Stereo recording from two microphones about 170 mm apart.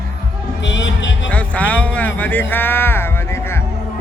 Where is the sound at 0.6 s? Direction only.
90° left.